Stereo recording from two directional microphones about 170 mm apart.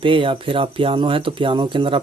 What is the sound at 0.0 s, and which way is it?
Speech, 30° right (ahead or behind).